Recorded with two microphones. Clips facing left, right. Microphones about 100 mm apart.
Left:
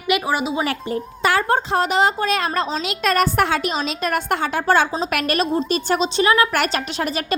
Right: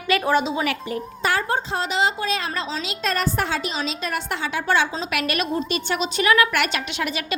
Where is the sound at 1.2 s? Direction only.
90° left.